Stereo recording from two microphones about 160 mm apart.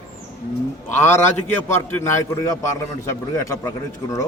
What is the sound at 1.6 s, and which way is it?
A man's voice, 15° left (ahead or behind).